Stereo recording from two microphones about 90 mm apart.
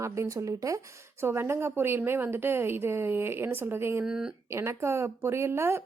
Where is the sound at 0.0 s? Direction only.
35° right (ahead or behind).